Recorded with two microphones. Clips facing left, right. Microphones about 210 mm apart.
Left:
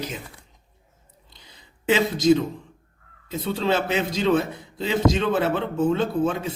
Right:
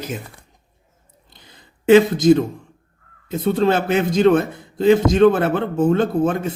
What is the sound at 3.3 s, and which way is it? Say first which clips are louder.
A man's voice: right 6 dB; 50° right (ahead or behind).